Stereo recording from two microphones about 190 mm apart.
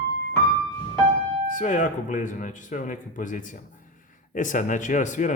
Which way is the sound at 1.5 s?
40° left (ahead or behind).